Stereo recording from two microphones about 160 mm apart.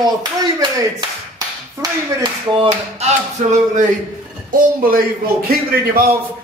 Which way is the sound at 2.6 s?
45° right (ahead or behind).